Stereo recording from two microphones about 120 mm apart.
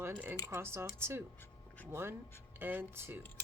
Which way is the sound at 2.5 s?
15° right (ahead or behind).